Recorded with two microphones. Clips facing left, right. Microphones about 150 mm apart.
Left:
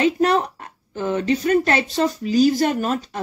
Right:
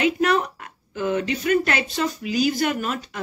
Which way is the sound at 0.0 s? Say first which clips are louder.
Left 2 dB; 35° left (ahead or behind).